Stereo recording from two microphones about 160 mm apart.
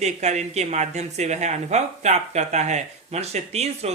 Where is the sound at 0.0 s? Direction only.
45° right (ahead or behind).